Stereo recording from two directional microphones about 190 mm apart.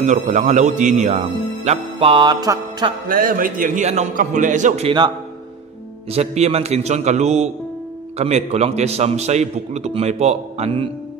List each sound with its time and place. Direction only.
0.0 s a man's voice: 40° right (ahead or behind); by 2.9 s 20° right (ahead or behind)
3.1 s a man's voice: 45° right (ahead or behind)
6.1 s a man's voice: 35° right (ahead or behind)